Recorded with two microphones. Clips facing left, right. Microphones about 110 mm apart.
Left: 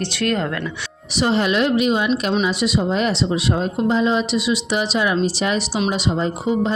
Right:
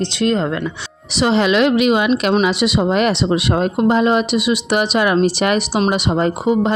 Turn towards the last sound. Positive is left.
turn(degrees=-65)  # may be behind; listen again after turning